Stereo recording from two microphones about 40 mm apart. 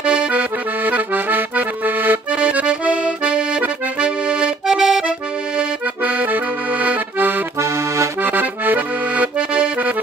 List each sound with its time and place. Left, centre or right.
0.0 s accordion: right
2.3 s accordion: right
6.0 s accordion: right
9.1 s accordion: right